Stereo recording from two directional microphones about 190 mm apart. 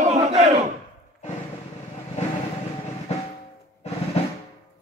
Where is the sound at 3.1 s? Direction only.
35° left (ahead or behind).